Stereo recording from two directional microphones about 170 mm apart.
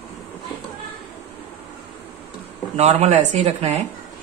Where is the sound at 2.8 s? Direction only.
40° right (ahead or behind).